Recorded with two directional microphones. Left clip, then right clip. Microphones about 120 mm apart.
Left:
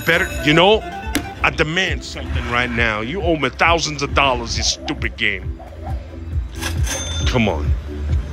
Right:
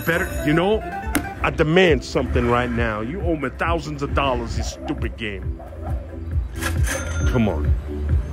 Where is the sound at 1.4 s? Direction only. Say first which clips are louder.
Right 1 dB; 15° right (ahead or behind).